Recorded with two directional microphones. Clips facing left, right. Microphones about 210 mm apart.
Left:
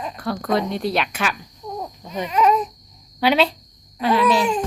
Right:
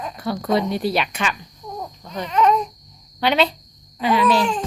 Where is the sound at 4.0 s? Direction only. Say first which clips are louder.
Even; 5° left (ahead or behind).